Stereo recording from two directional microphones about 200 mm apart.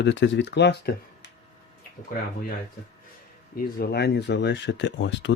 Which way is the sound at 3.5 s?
50° left (ahead or behind).